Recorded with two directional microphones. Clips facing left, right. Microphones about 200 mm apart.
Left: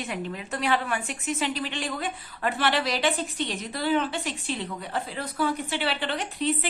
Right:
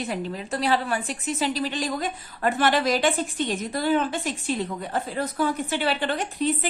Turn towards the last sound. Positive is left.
turn(degrees=-45)  # may be behind; listen again after turning